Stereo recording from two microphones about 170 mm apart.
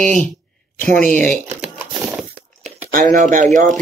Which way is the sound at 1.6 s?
5° right (ahead or behind).